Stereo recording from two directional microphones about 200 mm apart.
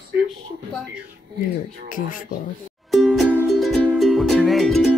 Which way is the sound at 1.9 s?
40° left (ahead or behind).